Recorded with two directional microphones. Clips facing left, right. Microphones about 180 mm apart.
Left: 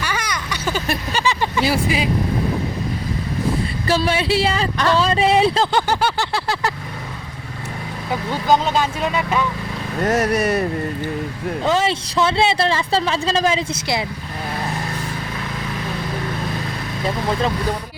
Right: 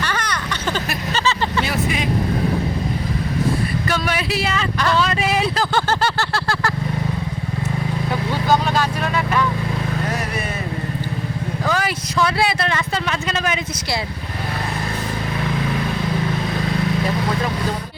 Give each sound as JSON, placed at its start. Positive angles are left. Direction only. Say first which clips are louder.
{"t": 0.0, "sound": "a sound", "louder": "right 1 dB", "side_deg": 10}
{"t": 1.1, "sound": "vehicle", "louder": "right 1 dB", "side_deg": 15}
{"t": 1.6, "sound": "speech", "louder": "left 3 dB", "side_deg": 30}
{"t": 3.8, "sound": "speech", "louder": "left 4 dB", "side_deg": 30}
{"t": 5.7, "sound": "vehicle", "louder": "left 1 dB", "side_deg": 15}
{"t": 8.3, "sound": "speech", "louder": "left 2 dB", "side_deg": 20}
{"t": 10.1, "sound": "speech", "louder": "left 7 dB", "side_deg": 45}
{"t": 11.6, "sound": "speech", "louder": "left 4 dB", "side_deg": 25}